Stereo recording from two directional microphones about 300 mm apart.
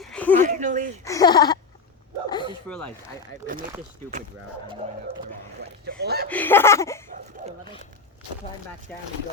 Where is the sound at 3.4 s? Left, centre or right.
Right.